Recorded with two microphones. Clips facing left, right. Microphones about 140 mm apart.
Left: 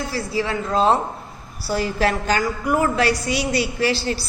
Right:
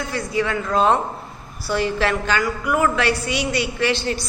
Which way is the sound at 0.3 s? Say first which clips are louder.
Right 1 dB; 30° left (ahead or behind).